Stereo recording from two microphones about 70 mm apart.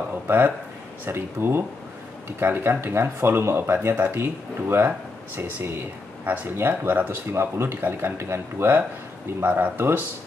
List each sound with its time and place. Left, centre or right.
1.0 s speech: right